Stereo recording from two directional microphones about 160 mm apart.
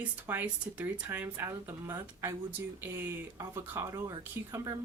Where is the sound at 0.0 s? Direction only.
10° right (ahead or behind).